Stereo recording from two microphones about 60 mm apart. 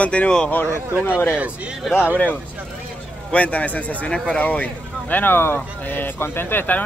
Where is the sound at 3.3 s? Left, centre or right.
Left.